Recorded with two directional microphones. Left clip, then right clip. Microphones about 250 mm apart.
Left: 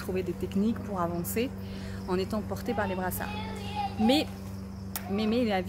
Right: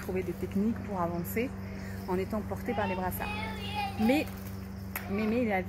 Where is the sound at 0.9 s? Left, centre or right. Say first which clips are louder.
Left 1 dB; centre.